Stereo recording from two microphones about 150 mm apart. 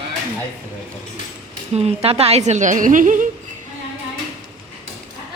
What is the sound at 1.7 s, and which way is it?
A woman's voice, 45° right (ahead or behind).